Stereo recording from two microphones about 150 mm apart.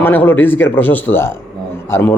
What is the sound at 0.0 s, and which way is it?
A man's voice, 15° left (ahead or behind).